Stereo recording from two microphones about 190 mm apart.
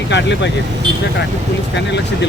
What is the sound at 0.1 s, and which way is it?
Speech, 65° left (ahead or behind).